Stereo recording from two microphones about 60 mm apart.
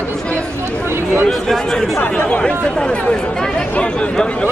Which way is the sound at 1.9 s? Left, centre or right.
Left.